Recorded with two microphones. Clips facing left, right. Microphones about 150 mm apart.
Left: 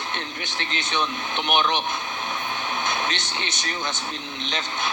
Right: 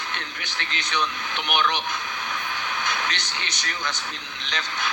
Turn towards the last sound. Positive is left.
turn(degrees=20)  # may be behind; listen again after turning